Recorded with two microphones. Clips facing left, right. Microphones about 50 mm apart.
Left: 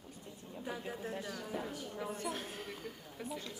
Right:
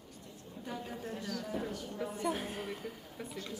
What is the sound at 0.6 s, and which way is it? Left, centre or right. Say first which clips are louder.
A woman's voice: even; centre.